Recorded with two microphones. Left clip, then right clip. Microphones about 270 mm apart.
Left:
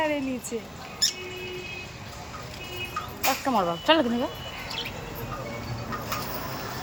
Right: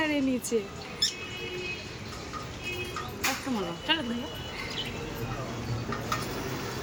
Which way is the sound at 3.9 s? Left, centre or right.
Centre.